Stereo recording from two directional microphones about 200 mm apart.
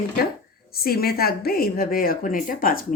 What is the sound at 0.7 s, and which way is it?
A woman's voice, 50° left (ahead or behind).